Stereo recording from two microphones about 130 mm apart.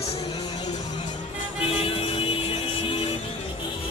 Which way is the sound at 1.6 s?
45° left (ahead or behind).